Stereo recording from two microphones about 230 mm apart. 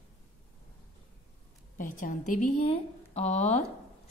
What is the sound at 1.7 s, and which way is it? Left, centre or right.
A woman's voice, left.